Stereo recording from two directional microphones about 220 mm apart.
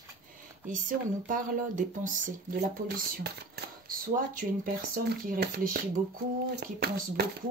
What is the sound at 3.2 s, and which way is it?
Speech, 45° right (ahead or behind).